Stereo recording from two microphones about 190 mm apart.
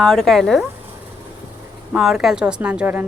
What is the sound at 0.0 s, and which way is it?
Speech, 5° left (ahead or behind).